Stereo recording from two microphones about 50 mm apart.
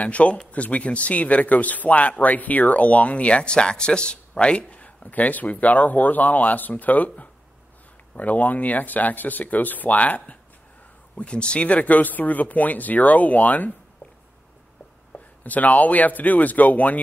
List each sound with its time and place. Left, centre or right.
0.0 s speech: left
11.1 s speech: left
15.1 s speech: left